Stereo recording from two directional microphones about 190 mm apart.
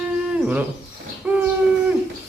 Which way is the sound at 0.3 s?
5° right (ahead or behind).